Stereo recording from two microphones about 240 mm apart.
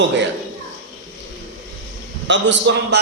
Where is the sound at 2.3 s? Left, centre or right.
Right.